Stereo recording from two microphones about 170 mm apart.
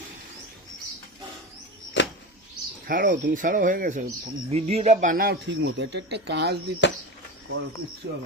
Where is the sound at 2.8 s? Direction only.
55° right (ahead or behind); by 6.6 s 80° right.